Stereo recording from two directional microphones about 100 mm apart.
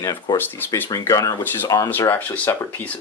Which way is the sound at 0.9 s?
35° left (ahead or behind).